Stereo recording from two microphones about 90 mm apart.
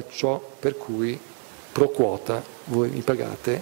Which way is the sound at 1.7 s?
10° left (ahead or behind).